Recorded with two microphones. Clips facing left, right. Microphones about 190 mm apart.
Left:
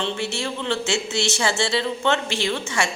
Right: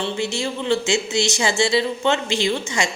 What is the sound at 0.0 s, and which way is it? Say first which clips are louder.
A woman's voice: right 2 dB; 15° right (ahead or behind).